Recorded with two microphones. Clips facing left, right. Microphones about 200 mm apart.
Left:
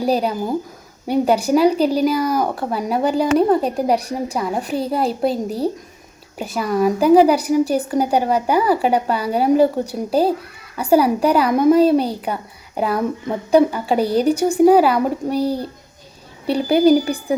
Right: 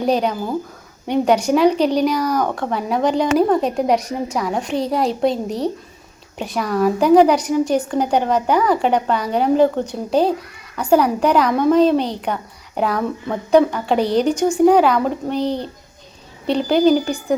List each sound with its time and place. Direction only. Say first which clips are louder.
0.0 s a woman's voice: even; 5° left (ahead or behind)
3.9 s a woman's voice: right 1 dB; 35° left (ahead or behind)
4.4 s a woman's voice: right 1 dB; 5° left (ahead or behind)